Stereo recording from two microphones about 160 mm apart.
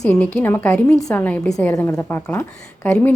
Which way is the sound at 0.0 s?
5° left (ahead or behind).